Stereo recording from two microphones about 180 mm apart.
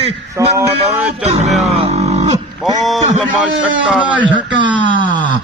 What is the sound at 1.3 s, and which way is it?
A man's voice, 40° right (ahead or behind).